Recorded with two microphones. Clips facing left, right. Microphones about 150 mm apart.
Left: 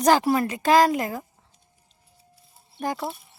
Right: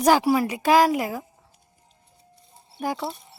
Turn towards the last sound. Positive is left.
turn(degrees=5)  # may be behind; listen again after turning